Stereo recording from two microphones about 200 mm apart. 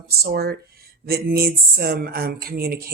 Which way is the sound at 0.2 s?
50° right (ahead or behind).